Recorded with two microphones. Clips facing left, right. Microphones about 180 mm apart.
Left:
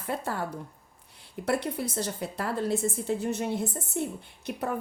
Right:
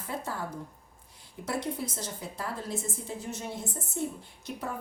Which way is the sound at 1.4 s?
65° left (ahead or behind).